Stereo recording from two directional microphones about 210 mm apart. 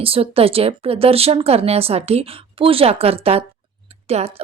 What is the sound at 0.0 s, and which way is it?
Speech, 25° right (ahead or behind).